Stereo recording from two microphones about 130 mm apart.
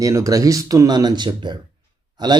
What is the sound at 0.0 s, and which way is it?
Speech, 25° right (ahead or behind).